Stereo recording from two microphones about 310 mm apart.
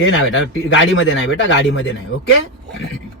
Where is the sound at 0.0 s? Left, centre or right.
Left.